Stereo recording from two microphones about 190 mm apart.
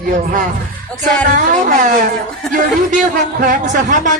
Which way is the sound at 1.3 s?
45° right (ahead or behind).